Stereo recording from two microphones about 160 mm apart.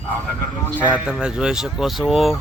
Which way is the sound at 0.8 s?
5° right (ahead or behind).